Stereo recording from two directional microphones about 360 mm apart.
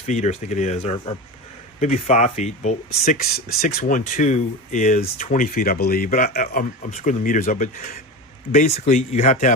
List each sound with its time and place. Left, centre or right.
0.0 s speech: centre